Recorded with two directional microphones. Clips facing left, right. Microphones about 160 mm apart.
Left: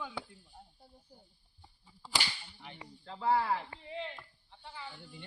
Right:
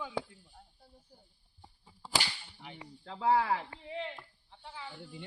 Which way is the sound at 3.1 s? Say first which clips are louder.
Right 2 dB; 90° right.